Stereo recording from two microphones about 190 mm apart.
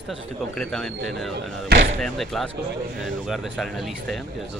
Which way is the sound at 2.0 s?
Centre (ahead or behind).